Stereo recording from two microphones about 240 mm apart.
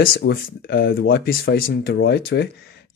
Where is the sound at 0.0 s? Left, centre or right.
Left.